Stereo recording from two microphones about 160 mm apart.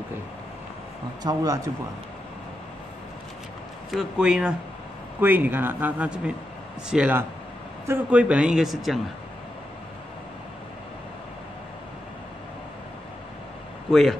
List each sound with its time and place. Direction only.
1.2 s speech: 20° right (ahead or behind)
3.9 s a man's voice: 5° right (ahead or behind)
13.8 s speech: centre (ahead or behind)